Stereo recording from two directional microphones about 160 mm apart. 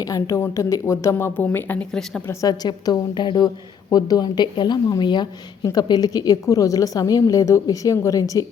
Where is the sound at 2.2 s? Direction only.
20° left (ahead or behind).